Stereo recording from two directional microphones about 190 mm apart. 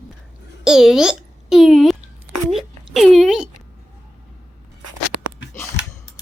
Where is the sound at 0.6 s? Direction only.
5° right (ahead or behind).